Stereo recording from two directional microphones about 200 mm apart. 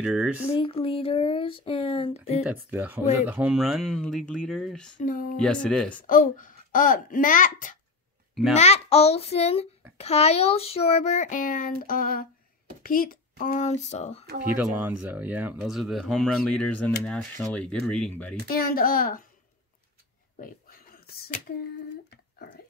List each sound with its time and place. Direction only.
0.0 s speech: 5° right (ahead or behind)
0.6 s speech: 30° left (ahead or behind)
2.4 s speech: 10° right (ahead or behind)
5.0 s speech: 40° left (ahead or behind)
5.4 s speech: 5° left (ahead or behind)
6.0 s a child's voice: 45° left (ahead or behind)
14.2 s speech: 50° right (ahead or behind)
14.5 s speech: 10° right (ahead or behind); by 18.3 s 5° left (ahead or behind)
18.5 s a child's voice: 50° left (ahead or behind)
20.3 s a sound: 45° left (ahead or behind)